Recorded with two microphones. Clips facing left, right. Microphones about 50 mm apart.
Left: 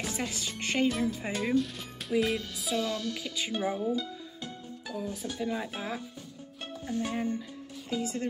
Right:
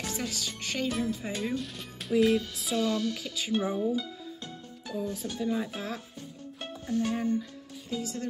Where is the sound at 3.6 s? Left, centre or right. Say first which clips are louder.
Right 2 dB; left.